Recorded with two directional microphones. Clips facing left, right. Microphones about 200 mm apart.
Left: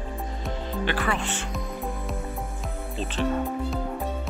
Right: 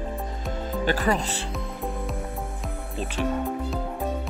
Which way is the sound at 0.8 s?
40° right (ahead or behind).